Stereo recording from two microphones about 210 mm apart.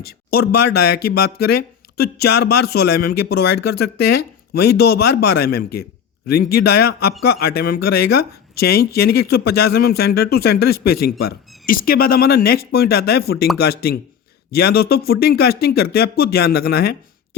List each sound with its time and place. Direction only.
0.0 s speech: 45° left (ahead or behind)